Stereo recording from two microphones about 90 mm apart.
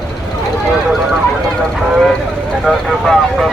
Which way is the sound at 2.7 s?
Centre (ahead or behind).